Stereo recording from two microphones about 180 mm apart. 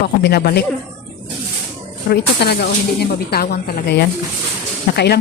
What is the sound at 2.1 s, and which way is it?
Speech, 65° left (ahead or behind).